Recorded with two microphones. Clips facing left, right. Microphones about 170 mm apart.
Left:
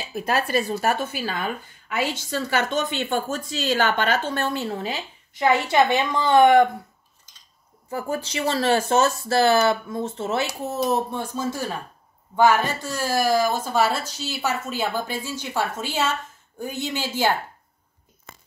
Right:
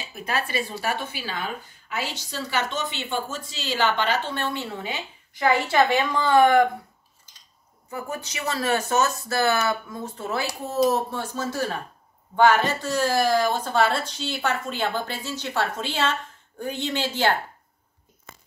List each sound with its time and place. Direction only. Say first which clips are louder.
0.1 s speech: left 5 dB; 40° left (ahead or behind)
5.3 s speech: left 2 dB; 20° left (ahead or behind)
7.9 s a woman's voice: left 5 dB; 30° left (ahead or behind); by 17.3 s 10° left (ahead or behind)